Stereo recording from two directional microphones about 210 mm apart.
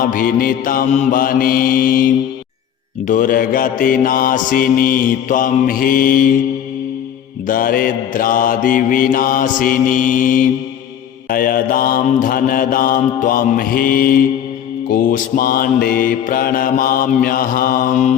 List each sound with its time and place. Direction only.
0.0 s mantra: 40° left (ahead or behind)
7.4 s mantra: 40° left (ahead or behind)